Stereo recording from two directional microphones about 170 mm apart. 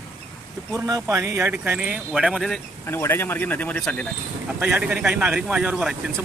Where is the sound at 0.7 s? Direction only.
20° right (ahead or behind); by 2.6 s centre (ahead or behind).